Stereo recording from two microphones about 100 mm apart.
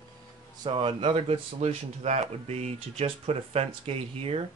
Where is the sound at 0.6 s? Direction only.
55° right (ahead or behind); by 4.4 s 80° right.